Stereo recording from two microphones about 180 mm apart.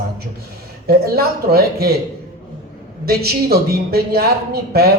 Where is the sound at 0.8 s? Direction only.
60° right (ahead or behind).